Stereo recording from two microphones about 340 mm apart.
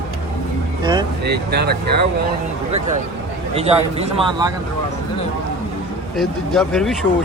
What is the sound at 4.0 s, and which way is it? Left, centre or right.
Speech, centre.